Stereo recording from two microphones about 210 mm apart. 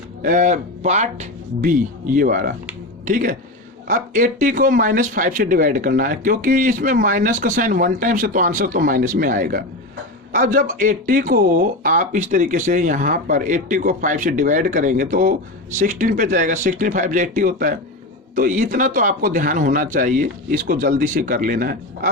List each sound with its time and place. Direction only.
0.2 s speech: 40° right (ahead or behind)